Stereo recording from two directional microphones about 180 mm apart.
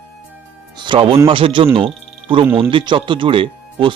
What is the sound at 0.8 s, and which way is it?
Speech, 30° right (ahead or behind).